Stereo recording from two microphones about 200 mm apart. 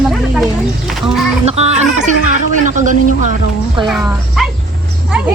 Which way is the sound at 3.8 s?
Centre (ahead or behind).